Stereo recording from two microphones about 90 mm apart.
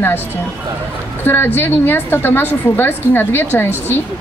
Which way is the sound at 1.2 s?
25° left (ahead or behind).